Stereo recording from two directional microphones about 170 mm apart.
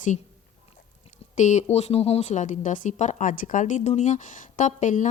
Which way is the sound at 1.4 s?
45° left (ahead or behind).